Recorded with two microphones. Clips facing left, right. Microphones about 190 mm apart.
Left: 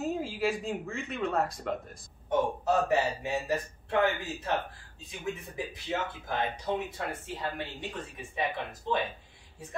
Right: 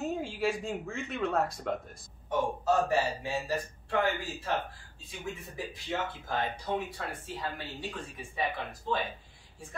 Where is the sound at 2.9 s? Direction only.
20° left (ahead or behind).